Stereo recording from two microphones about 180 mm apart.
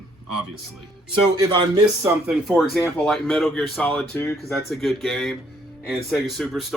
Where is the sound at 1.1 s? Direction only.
25° right (ahead or behind).